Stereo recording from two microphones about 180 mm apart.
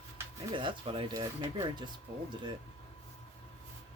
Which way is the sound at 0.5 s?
30° right (ahead or behind).